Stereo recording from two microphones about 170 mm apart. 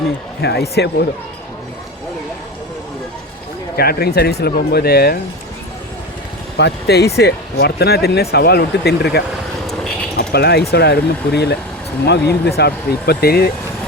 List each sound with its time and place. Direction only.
0.4 s speech: 75° left (ahead or behind)
3.8 s speech: 65° left (ahead or behind)
6.6 s speech: 80° left; by 13.5 s 65° left (ahead or behind)